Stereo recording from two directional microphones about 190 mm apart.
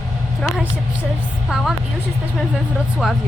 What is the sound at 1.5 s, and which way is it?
Speech, centre (ahead or behind).